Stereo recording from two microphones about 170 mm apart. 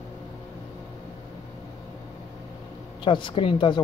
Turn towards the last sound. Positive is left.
turn(degrees=30)  # may be behind; listen again after turning